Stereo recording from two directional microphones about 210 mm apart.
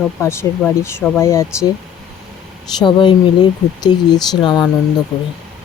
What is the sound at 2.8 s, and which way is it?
Speech, 20° left (ahead or behind).